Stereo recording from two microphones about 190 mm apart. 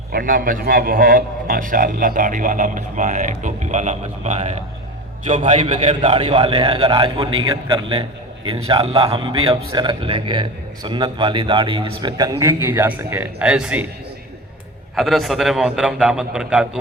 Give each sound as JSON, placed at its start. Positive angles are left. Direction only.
{"t": 0.1, "sound": "a man's voice", "side_deg": -50}
{"t": 14.9, "sound": "a man's voice", "side_deg": 0}